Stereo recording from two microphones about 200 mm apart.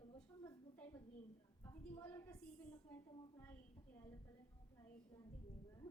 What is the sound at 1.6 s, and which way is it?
Speech, 10° left (ahead or behind).